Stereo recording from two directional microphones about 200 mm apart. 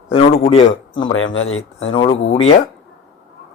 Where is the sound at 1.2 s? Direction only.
75° left (ahead or behind).